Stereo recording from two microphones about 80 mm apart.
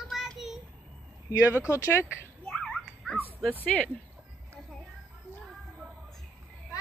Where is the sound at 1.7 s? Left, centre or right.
Left.